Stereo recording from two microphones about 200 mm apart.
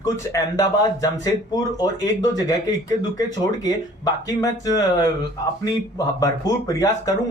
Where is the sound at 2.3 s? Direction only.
20° left (ahead or behind).